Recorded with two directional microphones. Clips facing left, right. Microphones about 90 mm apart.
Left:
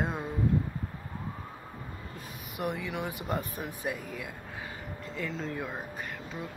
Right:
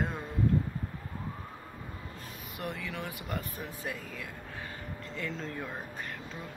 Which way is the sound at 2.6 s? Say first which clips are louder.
Left 5 dB; 15° left (ahead or behind).